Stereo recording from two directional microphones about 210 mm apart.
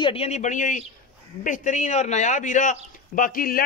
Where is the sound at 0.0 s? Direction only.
25° left (ahead or behind).